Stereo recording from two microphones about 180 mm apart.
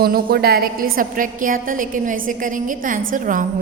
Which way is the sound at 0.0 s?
55° right (ahead or behind).